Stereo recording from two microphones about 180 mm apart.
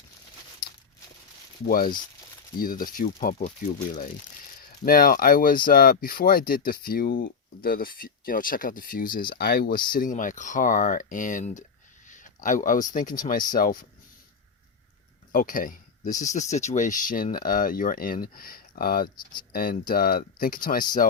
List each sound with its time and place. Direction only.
1.6 s speech: 55° left (ahead or behind)
4.9 s speech: 55° left (ahead or behind)
15.3 s speech: 50° left (ahead or behind)
19.1 s speech: 25° left (ahead or behind)
19.7 s speech: 50° left (ahead or behind)